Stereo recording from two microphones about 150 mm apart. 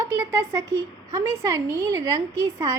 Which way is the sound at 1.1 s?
20° right (ahead or behind).